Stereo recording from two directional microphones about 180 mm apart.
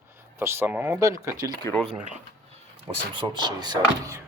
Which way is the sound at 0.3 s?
15° right (ahead or behind).